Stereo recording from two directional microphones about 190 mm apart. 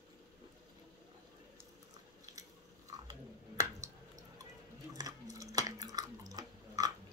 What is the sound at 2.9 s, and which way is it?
Chewing, 15° right (ahead or behind).